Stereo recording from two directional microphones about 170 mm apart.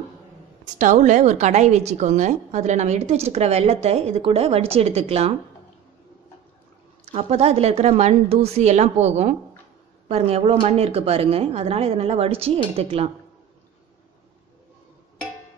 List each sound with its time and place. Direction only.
0.7 s a woman's voice: 45° right (ahead or behind)
7.1 s a woman's voice: 35° right (ahead or behind)